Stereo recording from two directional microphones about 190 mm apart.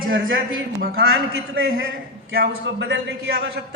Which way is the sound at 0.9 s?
75° right (ahead or behind).